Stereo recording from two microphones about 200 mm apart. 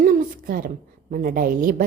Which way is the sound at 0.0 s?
45° right (ahead or behind).